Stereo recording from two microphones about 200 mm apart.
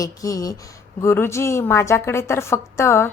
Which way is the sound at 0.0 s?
15° left (ahead or behind).